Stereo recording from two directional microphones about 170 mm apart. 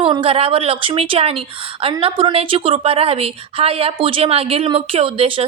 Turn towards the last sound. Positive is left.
turn(degrees=-35)  # may be behind; listen again after turning